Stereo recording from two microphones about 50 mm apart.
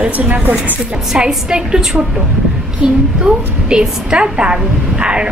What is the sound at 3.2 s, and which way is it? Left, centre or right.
Speech, centre.